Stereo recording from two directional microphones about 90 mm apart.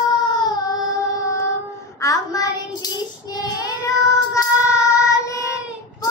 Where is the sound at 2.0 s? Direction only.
40° left (ahead or behind).